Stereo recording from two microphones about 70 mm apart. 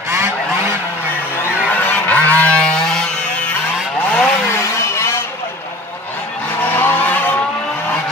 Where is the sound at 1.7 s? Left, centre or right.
Left.